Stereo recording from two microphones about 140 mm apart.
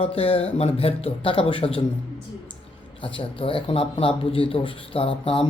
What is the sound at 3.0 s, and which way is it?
Speech, 40° left (ahead or behind).